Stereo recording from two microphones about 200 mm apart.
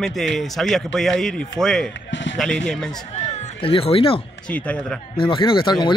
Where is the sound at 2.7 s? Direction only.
5° left (ahead or behind).